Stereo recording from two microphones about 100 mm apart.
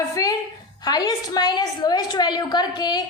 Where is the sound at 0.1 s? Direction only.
35° left (ahead or behind).